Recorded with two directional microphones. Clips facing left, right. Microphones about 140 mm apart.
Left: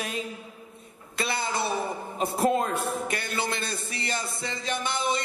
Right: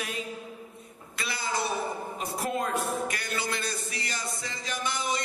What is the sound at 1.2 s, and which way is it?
A man's voice, 25° left (ahead or behind).